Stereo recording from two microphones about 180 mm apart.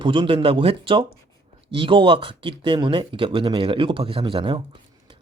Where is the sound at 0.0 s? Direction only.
25° right (ahead or behind).